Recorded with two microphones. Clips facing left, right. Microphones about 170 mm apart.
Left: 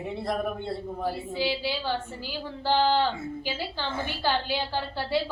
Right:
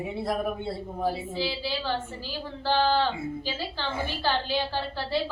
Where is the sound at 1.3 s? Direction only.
15° left (ahead or behind).